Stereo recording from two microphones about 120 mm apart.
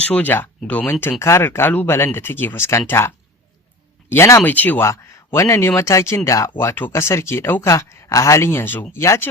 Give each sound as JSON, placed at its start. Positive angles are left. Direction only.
{"t": 0.1, "sound": "speech", "side_deg": 15}
{"t": 4.1, "sound": "speech", "side_deg": 25}